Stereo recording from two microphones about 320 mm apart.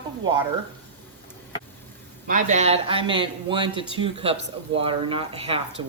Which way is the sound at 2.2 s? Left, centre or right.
Right.